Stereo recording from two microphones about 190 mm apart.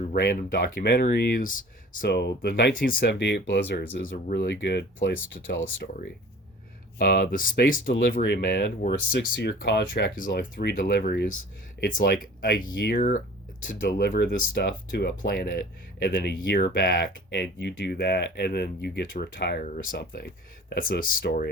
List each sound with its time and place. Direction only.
0.5 s speech: 60° left (ahead or behind)
2.0 s speech: 65° left (ahead or behind)
5.6 s speech: 50° left (ahead or behind)
8.1 s speech: 60° left (ahead or behind)
11.8 s speech: 45° left (ahead or behind)
20.7 s speech: 45° left (ahead or behind)